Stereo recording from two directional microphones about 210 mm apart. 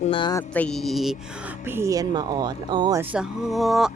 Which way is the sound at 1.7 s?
15° right (ahead or behind).